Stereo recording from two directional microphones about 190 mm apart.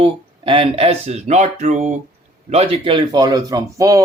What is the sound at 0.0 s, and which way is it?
Speech, 30° right (ahead or behind).